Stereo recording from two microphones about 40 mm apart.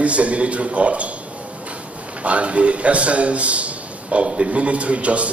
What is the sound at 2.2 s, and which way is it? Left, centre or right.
A man's voice, right.